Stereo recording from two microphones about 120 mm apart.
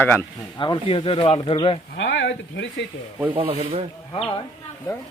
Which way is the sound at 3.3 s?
50° right (ahead or behind).